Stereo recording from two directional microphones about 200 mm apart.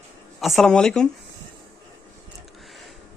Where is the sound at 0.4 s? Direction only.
Centre (ahead or behind).